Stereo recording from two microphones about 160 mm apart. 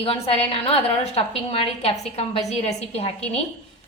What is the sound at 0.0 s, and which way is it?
A woman's voice, 35° left (ahead or behind).